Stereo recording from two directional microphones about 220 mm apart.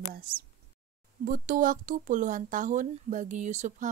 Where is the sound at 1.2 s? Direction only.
35° right (ahead or behind).